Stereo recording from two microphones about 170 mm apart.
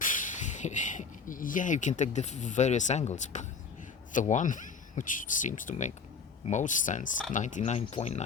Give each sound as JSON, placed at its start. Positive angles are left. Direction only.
{"t": 0.0, "sound": "speech", "side_deg": 50}